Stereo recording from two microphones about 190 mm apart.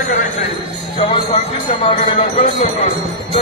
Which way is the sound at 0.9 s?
25° left (ahead or behind).